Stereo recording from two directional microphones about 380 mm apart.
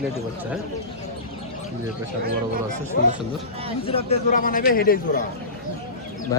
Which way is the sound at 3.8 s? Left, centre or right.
Centre.